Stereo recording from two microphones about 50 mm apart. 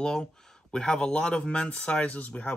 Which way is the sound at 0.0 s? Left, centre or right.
Centre.